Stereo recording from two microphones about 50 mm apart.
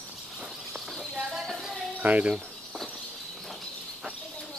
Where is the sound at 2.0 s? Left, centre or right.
Right.